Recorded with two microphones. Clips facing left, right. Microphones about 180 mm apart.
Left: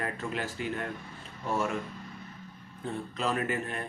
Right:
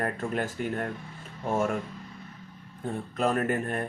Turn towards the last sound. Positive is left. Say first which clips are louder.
# right 5 dB
turn(degrees=-50)  # may be behind; listen again after turning